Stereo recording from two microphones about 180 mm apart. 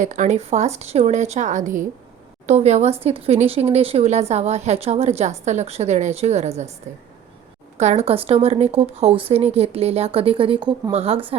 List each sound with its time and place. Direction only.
0.0 s speech: 45° right (ahead or behind)